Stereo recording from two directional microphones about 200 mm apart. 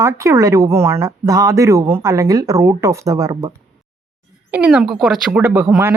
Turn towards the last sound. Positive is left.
turn(degrees=-10)  # may be behind; listen again after turning